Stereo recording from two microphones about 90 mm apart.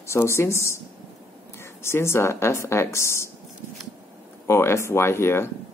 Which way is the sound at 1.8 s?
30° left (ahead or behind).